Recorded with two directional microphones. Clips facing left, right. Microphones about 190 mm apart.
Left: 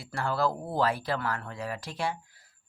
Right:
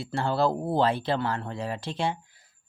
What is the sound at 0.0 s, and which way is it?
Speech, 25° right (ahead or behind).